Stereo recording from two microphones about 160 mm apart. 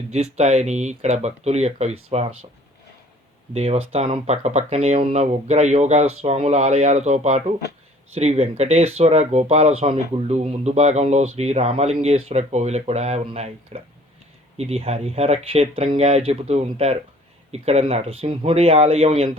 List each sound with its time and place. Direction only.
0.1 s speech: 40° right (ahead or behind)
3.5 s speech: 40° right (ahead or behind)